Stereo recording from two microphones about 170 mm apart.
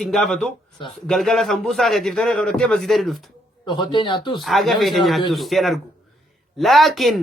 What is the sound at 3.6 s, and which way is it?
Speech, 25° left (ahead or behind).